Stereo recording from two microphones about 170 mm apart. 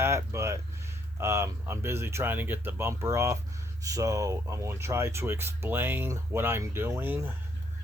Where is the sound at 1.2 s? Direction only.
15° right (ahead or behind).